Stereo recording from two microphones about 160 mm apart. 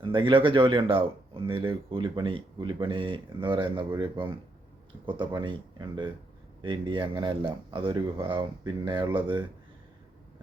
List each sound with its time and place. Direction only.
0.0 s speech: 30° right (ahead or behind)